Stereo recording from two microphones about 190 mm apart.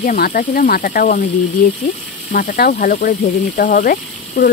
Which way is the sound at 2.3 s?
50° left (ahead or behind).